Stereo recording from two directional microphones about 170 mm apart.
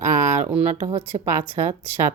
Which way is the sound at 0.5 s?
10° right (ahead or behind).